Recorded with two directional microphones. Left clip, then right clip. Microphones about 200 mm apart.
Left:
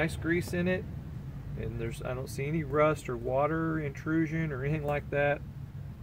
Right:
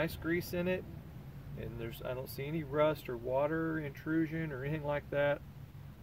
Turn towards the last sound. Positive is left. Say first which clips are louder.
# left 4 dB
turn(degrees=-20)  # may be behind; listen again after turning